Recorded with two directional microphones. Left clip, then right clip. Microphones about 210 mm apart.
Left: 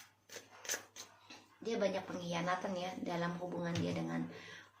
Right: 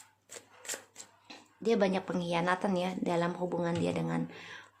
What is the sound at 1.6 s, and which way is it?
A woman's voice, 55° right (ahead or behind).